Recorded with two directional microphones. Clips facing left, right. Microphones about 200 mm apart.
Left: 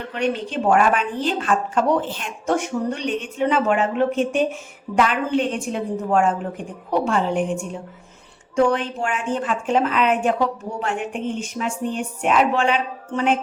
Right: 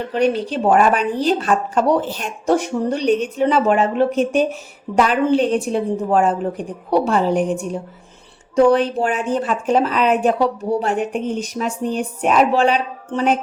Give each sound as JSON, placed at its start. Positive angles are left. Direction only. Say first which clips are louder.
{"t": 0.1, "sound": "speech", "louder": "right 5 dB", "side_deg": -35}